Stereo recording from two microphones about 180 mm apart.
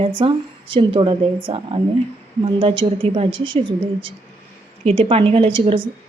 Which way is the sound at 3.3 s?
90° right.